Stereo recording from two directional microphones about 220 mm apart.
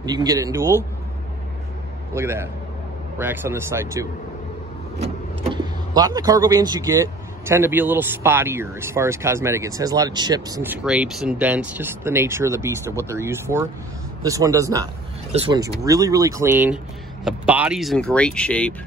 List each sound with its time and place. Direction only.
0.0 s speech: 15° right (ahead or behind)
2.1 s speech: 10° right (ahead or behind)
4.9 s speech: 30° right (ahead or behind); by 18.8 s 5° left (ahead or behind)